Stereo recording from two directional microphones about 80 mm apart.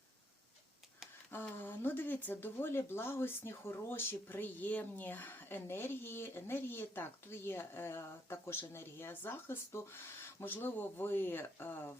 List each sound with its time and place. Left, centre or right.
1.3 s speech: left